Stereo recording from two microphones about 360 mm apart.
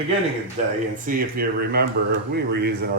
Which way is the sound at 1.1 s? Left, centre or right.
Right.